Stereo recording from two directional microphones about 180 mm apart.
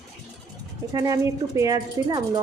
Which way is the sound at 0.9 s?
20° right (ahead or behind).